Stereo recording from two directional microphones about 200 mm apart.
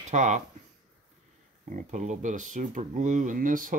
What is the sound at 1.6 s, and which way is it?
Speech, 40° right (ahead or behind).